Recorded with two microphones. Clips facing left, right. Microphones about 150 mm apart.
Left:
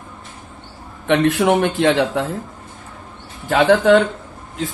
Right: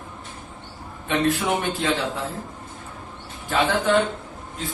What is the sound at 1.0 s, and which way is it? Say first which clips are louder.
Speech: left 7 dB; 75° left (ahead or behind).